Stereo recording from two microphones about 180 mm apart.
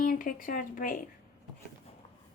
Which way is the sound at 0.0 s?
50° left (ahead or behind).